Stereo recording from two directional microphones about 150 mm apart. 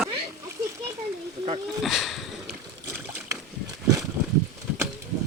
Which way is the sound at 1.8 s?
Centre (ahead or behind).